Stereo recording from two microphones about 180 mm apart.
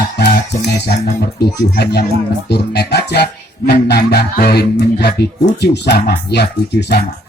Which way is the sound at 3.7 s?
65° left (ahead or behind).